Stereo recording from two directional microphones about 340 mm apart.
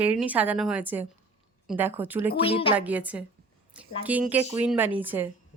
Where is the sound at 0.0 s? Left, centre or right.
Centre.